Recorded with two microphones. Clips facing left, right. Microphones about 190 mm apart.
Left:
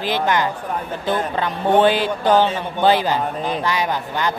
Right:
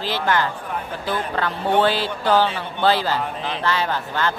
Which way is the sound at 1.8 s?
15° left (ahead or behind).